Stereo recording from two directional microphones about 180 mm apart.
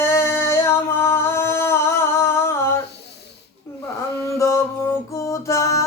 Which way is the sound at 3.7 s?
15° left (ahead or behind).